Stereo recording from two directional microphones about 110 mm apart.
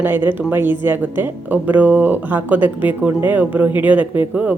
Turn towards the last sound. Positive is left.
turn(degrees=-15)  # may be behind; listen again after turning